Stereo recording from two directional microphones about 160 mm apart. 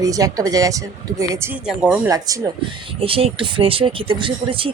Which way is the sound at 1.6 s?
5° right (ahead or behind).